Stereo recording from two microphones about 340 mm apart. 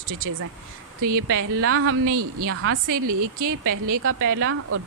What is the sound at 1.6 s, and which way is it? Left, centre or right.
Speech, right.